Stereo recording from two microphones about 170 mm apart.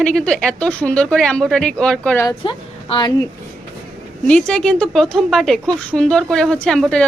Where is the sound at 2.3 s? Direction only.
25° left (ahead or behind).